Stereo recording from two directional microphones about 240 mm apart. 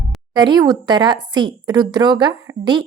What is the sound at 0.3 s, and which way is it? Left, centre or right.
Speech, centre.